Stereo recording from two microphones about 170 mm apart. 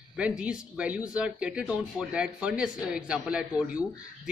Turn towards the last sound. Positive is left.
turn(degrees=-5)  # may be behind; listen again after turning